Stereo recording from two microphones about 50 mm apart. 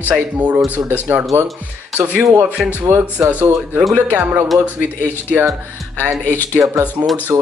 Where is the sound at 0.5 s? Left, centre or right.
Right.